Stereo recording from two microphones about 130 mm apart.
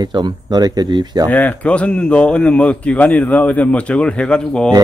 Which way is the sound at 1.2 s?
10° left (ahead or behind).